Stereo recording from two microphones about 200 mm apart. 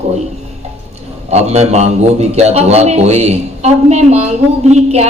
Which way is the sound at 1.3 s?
35° right (ahead or behind).